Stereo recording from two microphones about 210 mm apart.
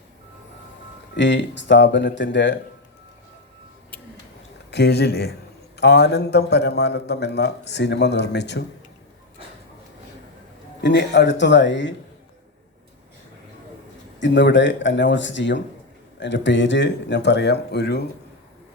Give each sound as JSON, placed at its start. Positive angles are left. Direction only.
{"t": 1.1, "sound": "speech", "side_deg": 55}
{"t": 4.7, "sound": "a man's voice", "side_deg": 50}
{"t": 10.8, "sound": "speech", "side_deg": 55}
{"t": 14.2, "sound": "speech", "side_deg": 60}